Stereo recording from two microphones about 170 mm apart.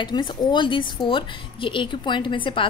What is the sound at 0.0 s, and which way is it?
A woman's voice, 30° left (ahead or behind).